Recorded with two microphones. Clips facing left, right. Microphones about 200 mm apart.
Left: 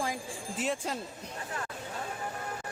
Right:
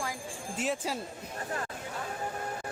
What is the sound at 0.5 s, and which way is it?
Speech, centre (ahead or behind).